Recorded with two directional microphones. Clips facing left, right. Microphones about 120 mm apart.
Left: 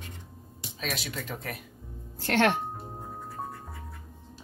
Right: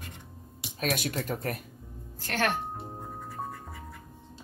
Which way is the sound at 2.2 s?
70° left (ahead or behind).